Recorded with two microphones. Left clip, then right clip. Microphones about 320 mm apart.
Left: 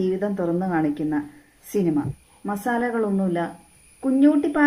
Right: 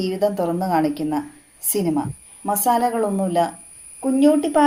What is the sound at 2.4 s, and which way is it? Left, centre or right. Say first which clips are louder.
A woman's voice: right 6 dB; right.